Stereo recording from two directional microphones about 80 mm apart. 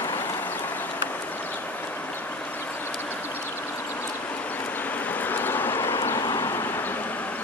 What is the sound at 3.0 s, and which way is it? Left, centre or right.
Vehicle, left.